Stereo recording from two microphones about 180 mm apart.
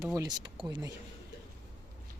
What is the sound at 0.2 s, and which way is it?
Speech, 20° right (ahead or behind).